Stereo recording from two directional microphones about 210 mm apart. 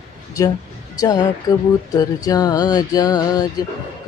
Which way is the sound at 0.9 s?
20° left (ahead or behind).